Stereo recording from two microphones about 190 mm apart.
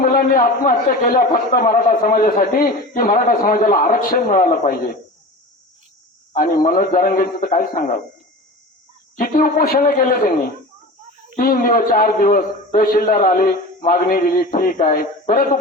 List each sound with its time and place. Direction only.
0.0 s a man's voice: 50° left (ahead or behind)
6.3 s a man's voice: 45° left (ahead or behind)
9.1 s a man's voice: 45° left (ahead or behind)
11.3 s a man's voice: 50° left (ahead or behind)